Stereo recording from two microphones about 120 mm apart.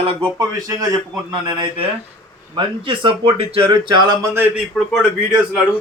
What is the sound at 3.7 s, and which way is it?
Speech, 40° right (ahead or behind).